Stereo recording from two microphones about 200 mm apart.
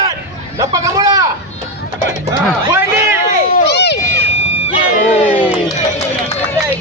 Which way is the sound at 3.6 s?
60° left (ahead or behind).